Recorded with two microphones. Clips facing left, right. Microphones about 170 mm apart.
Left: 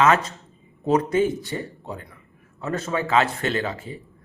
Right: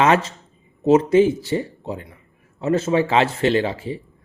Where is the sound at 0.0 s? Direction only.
30° right (ahead or behind).